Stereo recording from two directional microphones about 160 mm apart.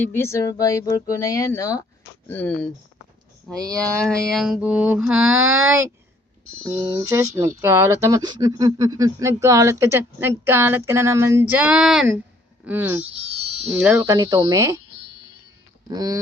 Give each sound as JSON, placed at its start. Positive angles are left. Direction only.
{"t": 0.0, "sound": "speech", "side_deg": 15}
{"t": 3.5, "sound": "mantra", "side_deg": 0}
{"t": 5.5, "sound": "speech", "side_deg": -15}
{"t": 7.0, "sound": "speech", "side_deg": -20}
{"t": 13.3, "sound": "a sound", "side_deg": -40}
{"t": 13.7, "sound": "speech", "side_deg": -10}
{"t": 14.1, "sound": "speech", "side_deg": -25}
{"t": 15.9, "sound": "speech", "side_deg": -25}